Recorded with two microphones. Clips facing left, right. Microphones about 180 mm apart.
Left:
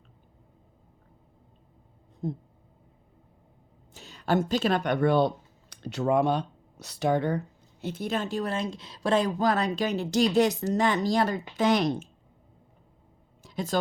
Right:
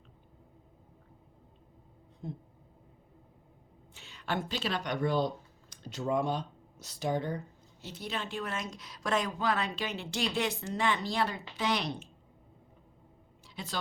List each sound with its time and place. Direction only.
2.2 s speech: 40° left (ahead or behind)
3.9 s speech: 40° left (ahead or behind)
13.4 s a sound: 45° left (ahead or behind)